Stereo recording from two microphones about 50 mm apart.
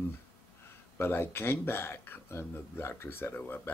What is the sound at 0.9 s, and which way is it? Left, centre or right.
Speech, left.